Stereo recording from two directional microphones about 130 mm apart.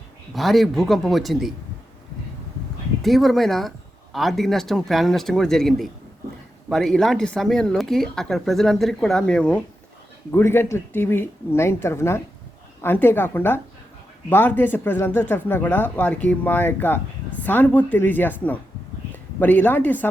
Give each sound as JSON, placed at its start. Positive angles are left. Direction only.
{"t": 0.3, "sound": "speech", "side_deg": 0}
{"t": 3.0, "sound": "speech", "side_deg": 0}
{"t": 10.3, "sound": "speech", "side_deg": 15}